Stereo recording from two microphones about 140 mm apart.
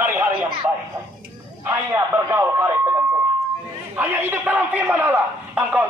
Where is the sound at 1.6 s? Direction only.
20° right (ahead or behind).